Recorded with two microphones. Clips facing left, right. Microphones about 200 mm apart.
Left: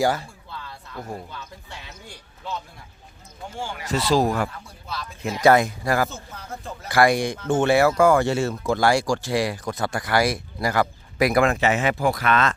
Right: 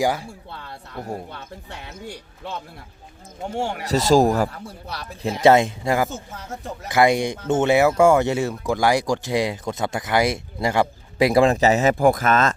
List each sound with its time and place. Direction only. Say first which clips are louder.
0.0 s speech: even; 10° right (ahead or behind)
0.3 s a sound: right 2 dB; 65° right (ahead or behind)
0.9 s speech: right 3 dB; 30° right (ahead or behind)
1.3 s speech: right 3 dB; 55° right (ahead or behind)
3.5 s speech: right 7 dB; 65° right (ahead or behind)
3.8 s speech: right 4 dB; 40° right (ahead or behind)
5.2 s speech: right 2 dB; 30° right (ahead or behind); by 12.5 s 45° right (ahead or behind)